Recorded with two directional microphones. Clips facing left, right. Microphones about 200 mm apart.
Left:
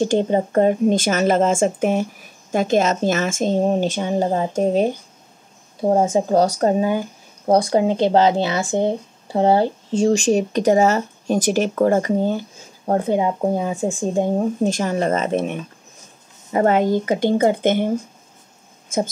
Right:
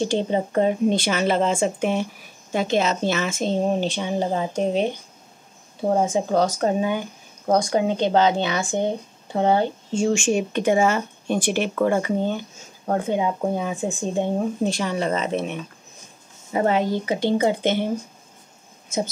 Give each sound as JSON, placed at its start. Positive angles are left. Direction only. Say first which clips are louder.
{"t": 0.0, "sound": "speech", "louder": "left 4 dB", "side_deg": 50}
{"t": 5.9, "sound": "speech", "louder": "left 4 dB", "side_deg": 40}
{"t": 16.6, "sound": "speech", "louder": "left 4 dB", "side_deg": 50}